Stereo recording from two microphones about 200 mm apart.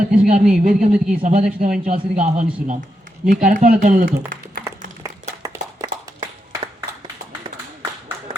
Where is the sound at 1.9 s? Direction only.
35° right (ahead or behind).